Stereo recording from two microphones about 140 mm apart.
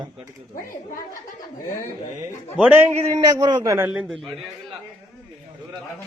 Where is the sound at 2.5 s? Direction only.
10° right (ahead or behind).